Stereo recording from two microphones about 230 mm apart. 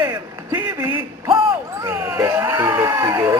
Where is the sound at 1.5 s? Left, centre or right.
Centre.